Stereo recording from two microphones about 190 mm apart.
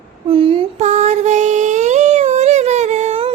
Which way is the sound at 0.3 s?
30° right (ahead or behind).